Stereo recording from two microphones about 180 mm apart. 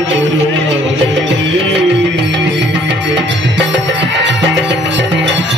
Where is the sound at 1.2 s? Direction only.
75° right (ahead or behind).